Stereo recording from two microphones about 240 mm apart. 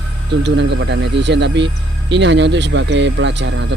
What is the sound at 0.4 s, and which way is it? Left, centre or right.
Speech, right.